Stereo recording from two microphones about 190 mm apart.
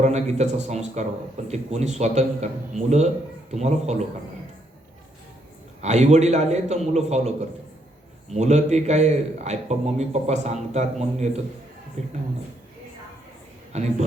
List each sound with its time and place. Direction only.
0.0 s a man's voice: 35° right (ahead or behind)
5.8 s a man's voice: 35° right (ahead or behind)
13.7 s a man's voice: 35° right (ahead or behind)